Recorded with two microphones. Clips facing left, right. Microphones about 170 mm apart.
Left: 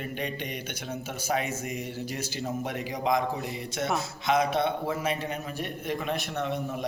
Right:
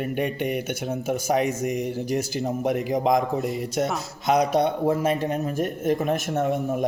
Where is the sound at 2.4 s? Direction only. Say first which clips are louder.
Right 7 dB; 40° right (ahead or behind).